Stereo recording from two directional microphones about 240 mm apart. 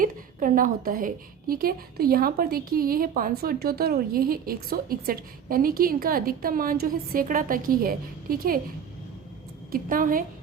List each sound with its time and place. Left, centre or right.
0.0 s a woman's voice: right
9.7 s a woman's voice: right